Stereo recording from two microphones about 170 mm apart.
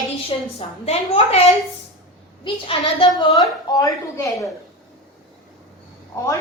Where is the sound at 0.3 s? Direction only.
35° left (ahead or behind).